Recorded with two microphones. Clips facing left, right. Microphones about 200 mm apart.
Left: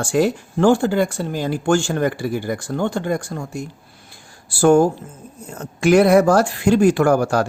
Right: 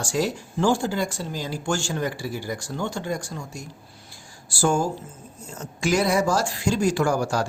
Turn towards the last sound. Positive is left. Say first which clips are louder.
# left 7 dB
turn(degrees=60)  # may be behind; listen again after turning